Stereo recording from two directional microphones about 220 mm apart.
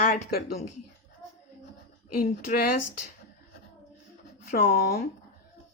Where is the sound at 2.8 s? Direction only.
90° left.